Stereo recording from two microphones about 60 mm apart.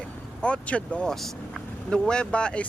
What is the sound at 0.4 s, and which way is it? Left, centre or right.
Speech, centre.